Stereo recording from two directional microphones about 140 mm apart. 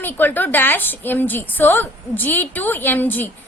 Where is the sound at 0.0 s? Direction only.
15° left (ahead or behind).